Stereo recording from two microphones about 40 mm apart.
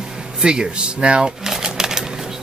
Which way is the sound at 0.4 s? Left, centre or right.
Right.